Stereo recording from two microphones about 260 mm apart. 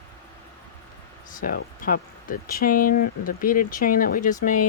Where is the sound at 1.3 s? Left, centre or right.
Left.